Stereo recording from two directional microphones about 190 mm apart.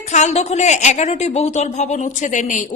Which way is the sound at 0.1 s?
35° left (ahead or behind).